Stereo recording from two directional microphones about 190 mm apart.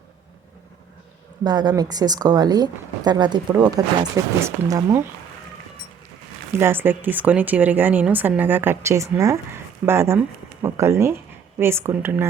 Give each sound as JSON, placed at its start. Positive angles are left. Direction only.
{"t": 1.5, "sound": "a woman's voice", "side_deg": -20}
{"t": 6.6, "sound": "a woman's voice", "side_deg": -10}